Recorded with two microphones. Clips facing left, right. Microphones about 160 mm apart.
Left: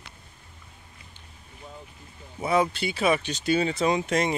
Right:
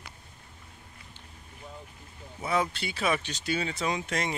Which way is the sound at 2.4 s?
10° left (ahead or behind).